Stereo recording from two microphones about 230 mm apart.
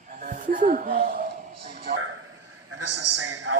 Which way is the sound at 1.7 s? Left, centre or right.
Right.